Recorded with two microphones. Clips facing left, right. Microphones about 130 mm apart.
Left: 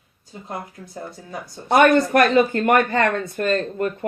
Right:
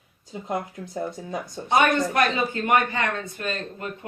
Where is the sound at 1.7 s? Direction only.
55° left (ahead or behind).